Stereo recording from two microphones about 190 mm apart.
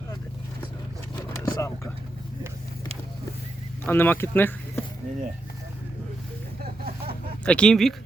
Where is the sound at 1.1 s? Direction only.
20° left (ahead or behind).